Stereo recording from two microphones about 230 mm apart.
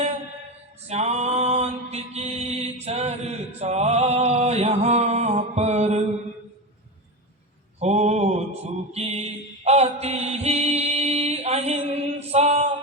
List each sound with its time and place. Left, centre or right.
0.9 s mantra: right
7.8 s mantra: right